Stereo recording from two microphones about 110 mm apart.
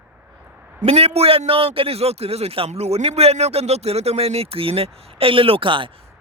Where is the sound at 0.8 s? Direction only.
70° right (ahead or behind).